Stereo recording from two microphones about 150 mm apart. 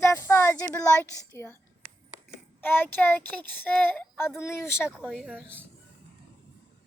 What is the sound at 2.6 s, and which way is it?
Speech, 15° left (ahead or behind).